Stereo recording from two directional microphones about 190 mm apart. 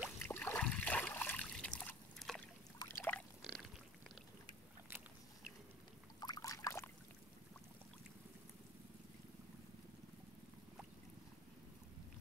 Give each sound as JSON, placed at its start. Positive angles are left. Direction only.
{"t": 0.2, "sound": "water", "side_deg": 10}
{"t": 2.8, "sound": "a sound", "side_deg": 15}
{"t": 6.1, "sound": "boat", "side_deg": 20}